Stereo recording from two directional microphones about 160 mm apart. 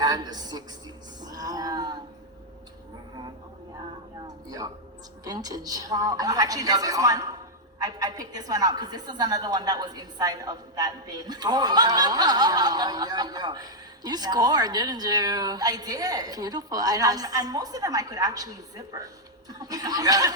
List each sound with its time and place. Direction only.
0.0 s a woman's voice: 25° right (ahead or behind)
1.2 s a sound: 25° right (ahead or behind)
4.4 s a woman's voice: 25° right (ahead or behind)